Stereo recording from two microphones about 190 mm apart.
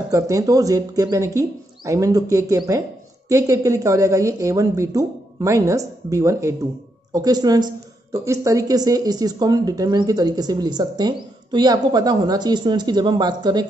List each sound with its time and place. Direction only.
0.1 s a woman's voice: 15° right (ahead or behind)